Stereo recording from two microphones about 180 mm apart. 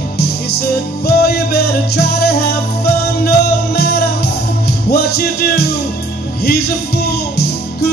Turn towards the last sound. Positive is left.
turn(degrees=60)  # may be behind; listen again after turning